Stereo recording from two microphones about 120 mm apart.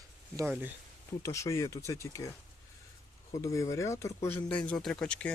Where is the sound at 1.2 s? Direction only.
25° left (ahead or behind).